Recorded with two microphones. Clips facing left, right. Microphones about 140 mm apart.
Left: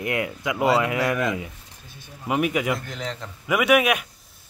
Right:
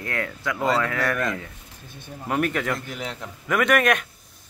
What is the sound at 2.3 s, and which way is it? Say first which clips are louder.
Speech: left 2 dB; 10° left (ahead or behind).